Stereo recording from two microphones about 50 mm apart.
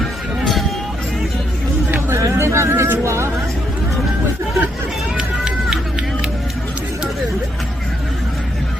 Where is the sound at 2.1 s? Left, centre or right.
Right.